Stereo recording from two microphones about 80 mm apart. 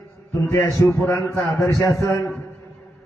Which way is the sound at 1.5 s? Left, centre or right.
Left.